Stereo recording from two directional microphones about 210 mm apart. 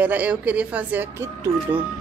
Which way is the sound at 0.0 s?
5° right (ahead or behind).